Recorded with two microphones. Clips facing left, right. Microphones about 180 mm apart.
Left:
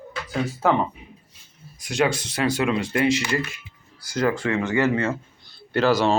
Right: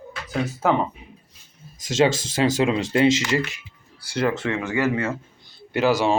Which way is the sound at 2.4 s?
25° right (ahead or behind).